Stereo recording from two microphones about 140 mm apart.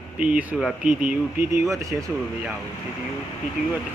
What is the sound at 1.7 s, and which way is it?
Speech, 25° right (ahead or behind).